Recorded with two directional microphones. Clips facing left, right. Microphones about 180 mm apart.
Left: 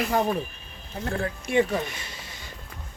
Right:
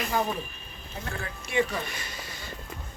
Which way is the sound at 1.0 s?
50° left (ahead or behind).